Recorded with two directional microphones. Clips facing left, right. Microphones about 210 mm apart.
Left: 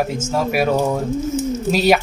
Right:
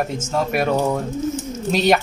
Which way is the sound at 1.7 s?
5° left (ahead or behind).